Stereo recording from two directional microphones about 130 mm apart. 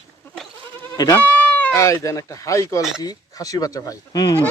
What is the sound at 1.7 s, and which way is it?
Speech, 25° left (ahead or behind).